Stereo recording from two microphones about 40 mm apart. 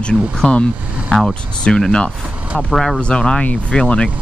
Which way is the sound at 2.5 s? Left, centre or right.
Centre.